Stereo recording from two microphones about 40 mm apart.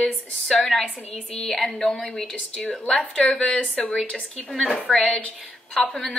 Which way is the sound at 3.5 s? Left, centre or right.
Left.